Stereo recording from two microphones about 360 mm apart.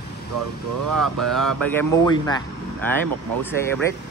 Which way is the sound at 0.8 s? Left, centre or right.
Right.